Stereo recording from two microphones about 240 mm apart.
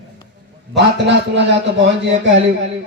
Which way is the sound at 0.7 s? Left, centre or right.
Right.